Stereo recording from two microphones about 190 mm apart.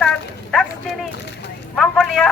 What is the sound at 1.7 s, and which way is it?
Speech, centre (ahead or behind).